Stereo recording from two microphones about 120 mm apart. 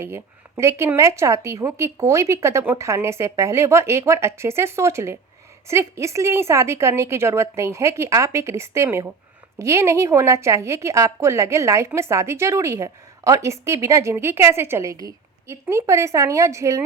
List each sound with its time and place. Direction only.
0.0 s speech: 20° right (ahead or behind)